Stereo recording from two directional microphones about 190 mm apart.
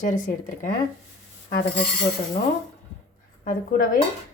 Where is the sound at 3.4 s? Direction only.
45° left (ahead or behind).